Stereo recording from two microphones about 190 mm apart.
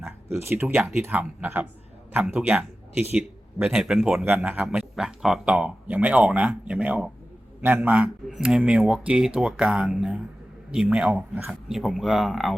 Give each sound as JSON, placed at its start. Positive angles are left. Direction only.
{"t": 0.3, "sound": "speech", "side_deg": -15}